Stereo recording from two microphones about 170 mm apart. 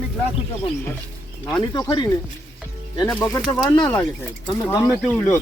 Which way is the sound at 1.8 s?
25° left (ahead or behind).